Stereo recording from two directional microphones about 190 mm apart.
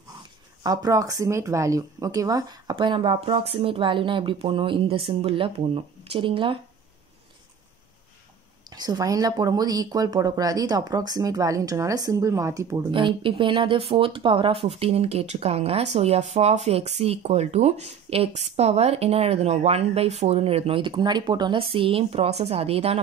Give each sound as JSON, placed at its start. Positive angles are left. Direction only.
{"t": 0.7, "sound": "speech", "side_deg": -20}
{"t": 8.6, "sound": "speech", "side_deg": -20}